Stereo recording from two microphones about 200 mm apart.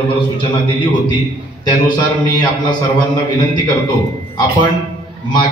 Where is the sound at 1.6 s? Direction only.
20° left (ahead or behind).